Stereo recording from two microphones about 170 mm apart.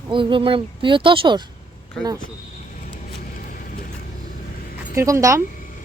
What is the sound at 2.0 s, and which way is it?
Speech, 5° left (ahead or behind).